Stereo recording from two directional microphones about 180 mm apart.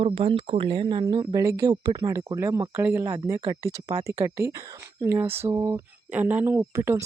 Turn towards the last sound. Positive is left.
turn(degrees=-15)  # may be behind; listen again after turning